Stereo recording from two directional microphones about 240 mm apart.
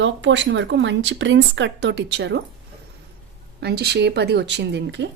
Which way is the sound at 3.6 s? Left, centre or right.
Right.